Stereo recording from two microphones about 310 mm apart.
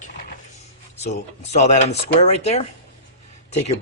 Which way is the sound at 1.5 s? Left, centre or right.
Left.